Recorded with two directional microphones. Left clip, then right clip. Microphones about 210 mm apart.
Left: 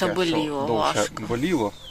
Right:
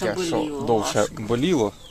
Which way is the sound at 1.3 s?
40° right (ahead or behind).